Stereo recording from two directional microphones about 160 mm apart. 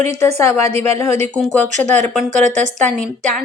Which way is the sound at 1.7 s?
45° right (ahead or behind).